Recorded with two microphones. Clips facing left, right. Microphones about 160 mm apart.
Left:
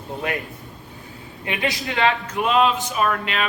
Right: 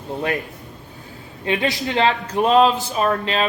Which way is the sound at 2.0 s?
30° right (ahead or behind).